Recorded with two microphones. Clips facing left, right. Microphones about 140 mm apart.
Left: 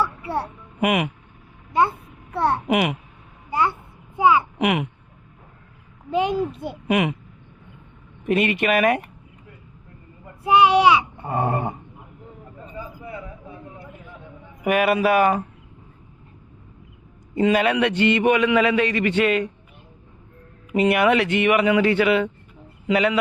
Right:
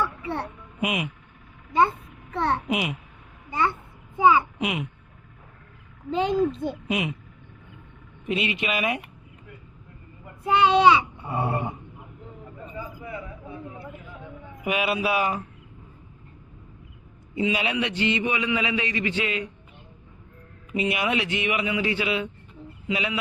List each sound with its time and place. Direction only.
0.0 s music: 10° left (ahead or behind)
0.8 s a man's voice: 60° left (ahead or behind)
2.3 s a child's voice: 10° left (ahead or behind)
2.6 s a man's voice: 60° left (ahead or behind)
3.5 s a child's voice: 10° left (ahead or behind)
4.5 s a child's voice: 65° left (ahead or behind)
6.1 s a child's voice: 10° left (ahead or behind)
6.8 s a man's voice: 60° left (ahead or behind)
8.3 s a man's voice: 55° left (ahead or behind)
10.4 s a child's voice: 10° left (ahead or behind)
11.2 s a sound: 50° left (ahead or behind)
14.6 s speech: 55° left (ahead or behind)
17.3 s a man's voice: 50° left (ahead or behind)
20.7 s a man's voice: 60° left (ahead or behind)